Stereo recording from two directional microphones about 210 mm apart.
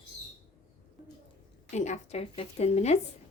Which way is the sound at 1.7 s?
35° left (ahead or behind).